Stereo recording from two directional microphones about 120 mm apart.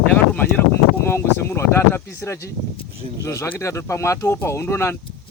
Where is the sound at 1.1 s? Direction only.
20° left (ahead or behind).